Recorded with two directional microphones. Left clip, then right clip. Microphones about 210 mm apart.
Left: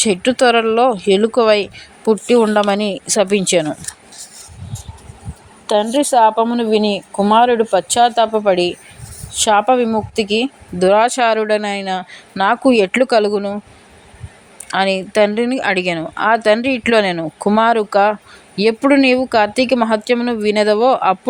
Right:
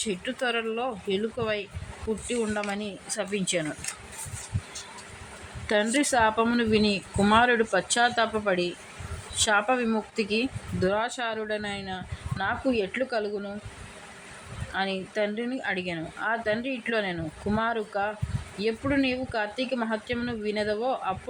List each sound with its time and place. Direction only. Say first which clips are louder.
0.0 s a woman's voice: left 16 dB; 50° left (ahead or behind)
5.6 s a woman's voice: left 10 dB; 25° left (ahead or behind); by 13.6 s 45° left (ahead or behind)
14.7 s a woman's voice: left 14 dB; 50° left (ahead or behind)